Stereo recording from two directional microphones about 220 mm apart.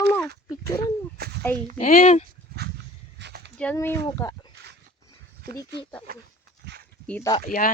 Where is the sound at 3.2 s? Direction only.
50° right (ahead or behind).